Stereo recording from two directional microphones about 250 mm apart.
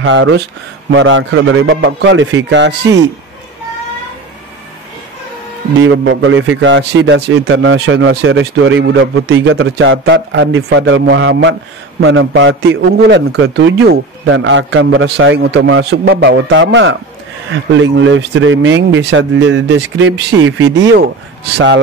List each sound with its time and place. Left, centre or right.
0.0 s a man's voice: right
5.8 s a man's voice: right